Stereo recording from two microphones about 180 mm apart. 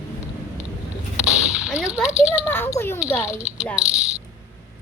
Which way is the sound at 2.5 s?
15° left (ahead or behind).